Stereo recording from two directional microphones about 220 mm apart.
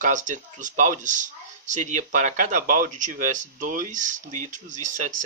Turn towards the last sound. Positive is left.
turn(degrees=-35)  # may be behind; listen again after turning